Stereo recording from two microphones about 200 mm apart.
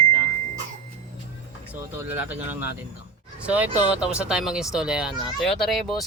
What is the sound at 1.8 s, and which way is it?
Speech, 10° right (ahead or behind).